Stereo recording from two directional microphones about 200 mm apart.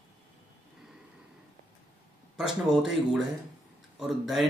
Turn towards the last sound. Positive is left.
turn(degrees=0)  # may be behind; listen again after turning